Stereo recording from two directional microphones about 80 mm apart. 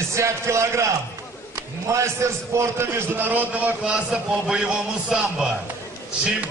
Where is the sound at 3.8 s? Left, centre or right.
Centre.